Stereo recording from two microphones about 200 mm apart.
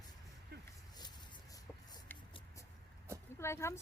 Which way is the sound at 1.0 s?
20° left (ahead or behind).